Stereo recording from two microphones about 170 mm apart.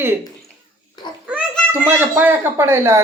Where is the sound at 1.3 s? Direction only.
10° right (ahead or behind).